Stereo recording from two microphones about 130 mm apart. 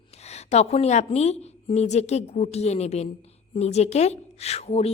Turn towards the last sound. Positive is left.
turn(degrees=55)  # may be behind; listen again after turning